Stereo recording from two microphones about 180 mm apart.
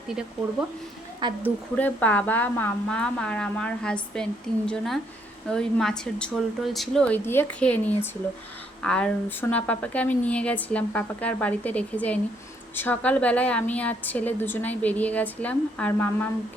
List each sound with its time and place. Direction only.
1.2 s a woman's voice: 25° right (ahead or behind)
1.7 s a woman's voice: 10° left (ahead or behind)